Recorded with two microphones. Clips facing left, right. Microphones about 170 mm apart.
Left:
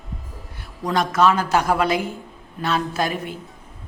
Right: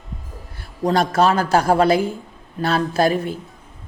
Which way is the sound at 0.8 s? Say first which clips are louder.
Right 2 dB; 30° right (ahead or behind).